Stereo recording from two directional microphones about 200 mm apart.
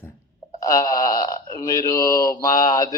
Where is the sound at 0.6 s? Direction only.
15° left (ahead or behind).